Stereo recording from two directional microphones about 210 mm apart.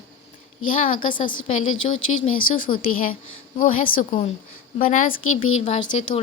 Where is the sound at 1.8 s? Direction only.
75° left (ahead or behind).